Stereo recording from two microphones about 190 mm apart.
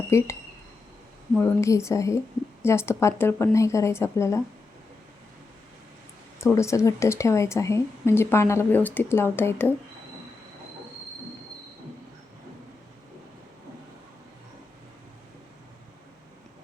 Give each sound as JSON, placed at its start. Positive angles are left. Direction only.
{"t": 0.1, "sound": "a woman's voice", "side_deg": 15}
{"t": 1.4, "sound": "a woman's voice", "side_deg": 15}
{"t": 6.4, "sound": "a woman's voice", "side_deg": 15}